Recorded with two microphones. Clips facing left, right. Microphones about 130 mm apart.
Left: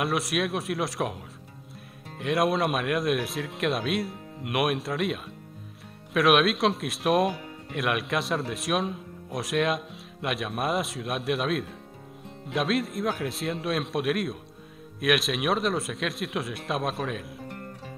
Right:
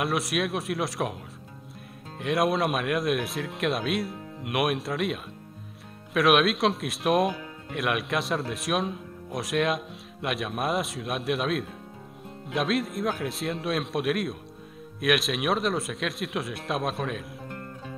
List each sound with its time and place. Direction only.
0.0 s speech: centre (ahead or behind)
2.1 s speech: centre (ahead or behind)